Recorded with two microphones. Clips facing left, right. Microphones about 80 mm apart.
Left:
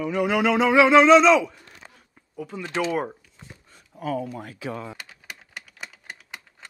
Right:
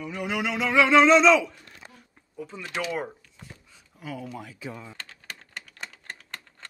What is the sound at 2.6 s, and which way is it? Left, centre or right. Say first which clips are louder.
Speech: left 5 dB; left.